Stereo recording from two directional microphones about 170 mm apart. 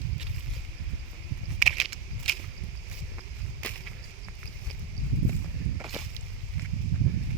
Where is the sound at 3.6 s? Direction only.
10° left (ahead or behind).